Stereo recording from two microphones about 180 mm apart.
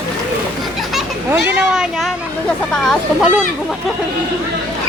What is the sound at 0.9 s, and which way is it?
A child's voice, 5° right (ahead or behind).